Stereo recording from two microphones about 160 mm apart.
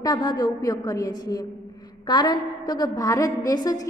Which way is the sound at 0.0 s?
25° left (ahead or behind).